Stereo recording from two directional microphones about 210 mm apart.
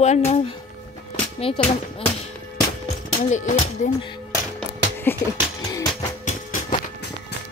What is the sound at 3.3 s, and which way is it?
Speech, 35° left (ahead or behind).